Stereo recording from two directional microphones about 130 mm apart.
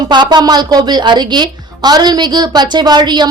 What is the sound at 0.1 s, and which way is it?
A woman's voice, 35° right (ahead or behind).